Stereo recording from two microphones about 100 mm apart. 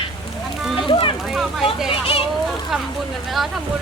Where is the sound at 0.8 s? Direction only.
55° left (ahead or behind).